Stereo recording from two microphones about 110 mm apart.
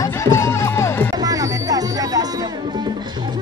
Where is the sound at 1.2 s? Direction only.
35° right (ahead or behind).